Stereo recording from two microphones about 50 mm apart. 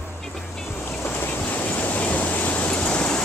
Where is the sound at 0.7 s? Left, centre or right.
Left.